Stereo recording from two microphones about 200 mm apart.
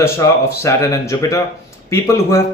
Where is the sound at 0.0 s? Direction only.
15° left (ahead or behind).